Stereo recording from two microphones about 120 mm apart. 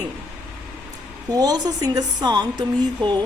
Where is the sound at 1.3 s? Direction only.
35° right (ahead or behind).